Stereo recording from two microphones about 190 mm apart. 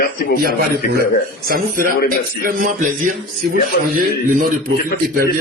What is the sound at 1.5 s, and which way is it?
Speech, 50° right (ahead or behind).